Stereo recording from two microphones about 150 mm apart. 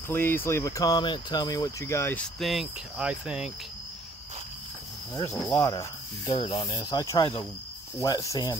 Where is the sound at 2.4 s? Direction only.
Centre (ahead or behind).